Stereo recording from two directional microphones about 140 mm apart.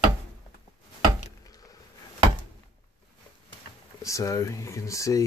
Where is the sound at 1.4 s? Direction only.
25° left (ahead or behind).